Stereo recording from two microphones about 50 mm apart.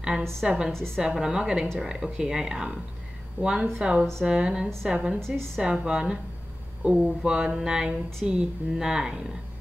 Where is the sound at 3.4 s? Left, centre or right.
Right.